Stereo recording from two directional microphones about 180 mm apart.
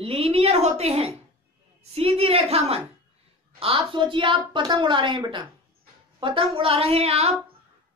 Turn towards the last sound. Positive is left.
turn(degrees=-35)  # may be behind; listen again after turning